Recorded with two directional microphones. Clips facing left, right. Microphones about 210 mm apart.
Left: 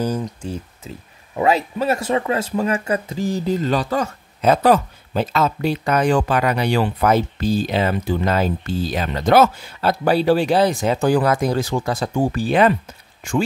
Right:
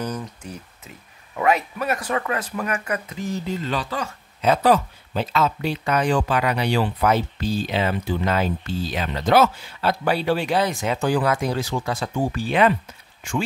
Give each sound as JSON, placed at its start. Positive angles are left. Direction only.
{"t": 0.0, "sound": "speech", "side_deg": 30}